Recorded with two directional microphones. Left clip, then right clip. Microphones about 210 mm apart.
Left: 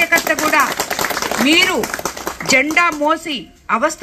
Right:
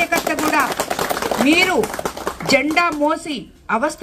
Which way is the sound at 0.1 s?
45° right (ahead or behind).